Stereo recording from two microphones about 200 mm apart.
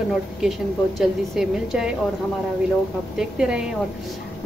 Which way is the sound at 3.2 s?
5° right (ahead or behind).